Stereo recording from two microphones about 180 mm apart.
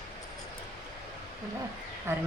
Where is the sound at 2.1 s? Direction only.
15° right (ahead or behind).